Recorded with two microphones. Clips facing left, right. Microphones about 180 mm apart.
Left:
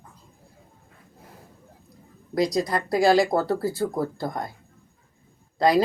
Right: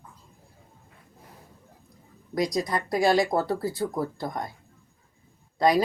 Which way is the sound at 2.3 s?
30° left (ahead or behind).